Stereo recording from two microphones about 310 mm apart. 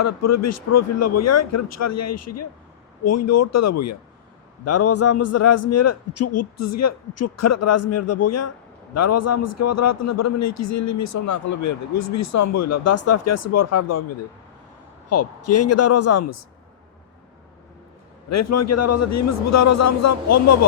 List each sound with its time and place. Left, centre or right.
0.0 s a man's voice: left
15.1 s a man's voice: left
18.3 s a man's voice: left